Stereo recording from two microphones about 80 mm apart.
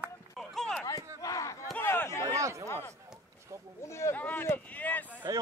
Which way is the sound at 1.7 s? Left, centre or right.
Left.